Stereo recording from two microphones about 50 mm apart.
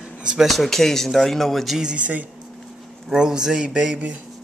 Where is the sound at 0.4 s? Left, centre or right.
Centre.